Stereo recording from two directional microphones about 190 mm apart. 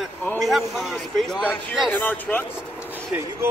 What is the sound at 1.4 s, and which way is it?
Speech, 5° left (ahead or behind).